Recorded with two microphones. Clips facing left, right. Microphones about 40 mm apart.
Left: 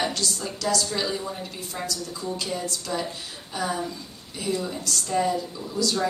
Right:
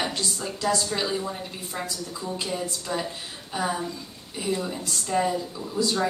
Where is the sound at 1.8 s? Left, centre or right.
Right.